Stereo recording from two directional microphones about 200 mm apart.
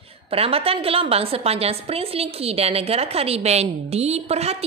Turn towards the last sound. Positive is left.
turn(degrees=-30)  # may be behind; listen again after turning